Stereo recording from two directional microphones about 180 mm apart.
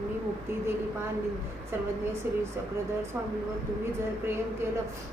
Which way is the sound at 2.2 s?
10° right (ahead or behind).